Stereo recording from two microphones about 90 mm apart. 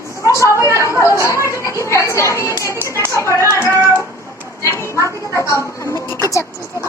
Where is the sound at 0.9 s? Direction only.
35° left (ahead or behind).